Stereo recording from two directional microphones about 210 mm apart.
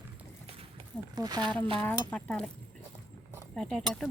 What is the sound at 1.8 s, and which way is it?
Speech, 10° left (ahead or behind).